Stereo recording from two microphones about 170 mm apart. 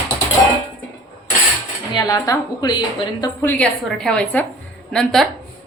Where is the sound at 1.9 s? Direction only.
20° left (ahead or behind).